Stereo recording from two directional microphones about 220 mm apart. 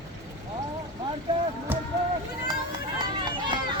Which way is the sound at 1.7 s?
10° right (ahead or behind).